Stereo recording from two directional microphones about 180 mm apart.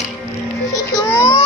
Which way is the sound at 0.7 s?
20° left (ahead or behind).